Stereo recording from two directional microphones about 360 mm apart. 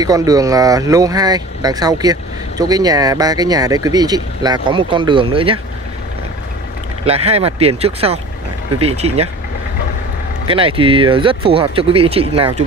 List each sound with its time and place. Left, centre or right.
0.0 s speech: centre
7.1 s speech: centre
10.5 s speech: centre